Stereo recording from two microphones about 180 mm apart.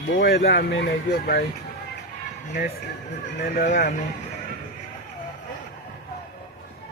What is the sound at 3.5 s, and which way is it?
Speech, 45° left (ahead or behind).